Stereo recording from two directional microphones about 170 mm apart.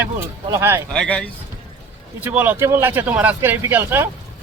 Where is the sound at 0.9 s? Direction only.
5° left (ahead or behind).